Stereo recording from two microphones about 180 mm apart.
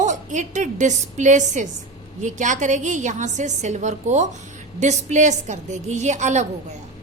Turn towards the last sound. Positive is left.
turn(degrees=-40)  # may be behind; listen again after turning